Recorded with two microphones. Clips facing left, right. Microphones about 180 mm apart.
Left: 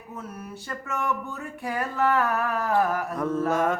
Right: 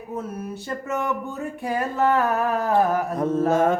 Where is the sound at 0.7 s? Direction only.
20° right (ahead or behind).